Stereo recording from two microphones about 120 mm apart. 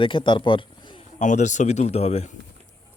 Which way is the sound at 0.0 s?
45° left (ahead or behind).